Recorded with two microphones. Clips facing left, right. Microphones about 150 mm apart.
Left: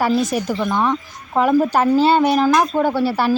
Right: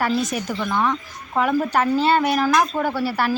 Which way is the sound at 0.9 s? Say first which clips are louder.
Left 3 dB; 30° left (ahead or behind).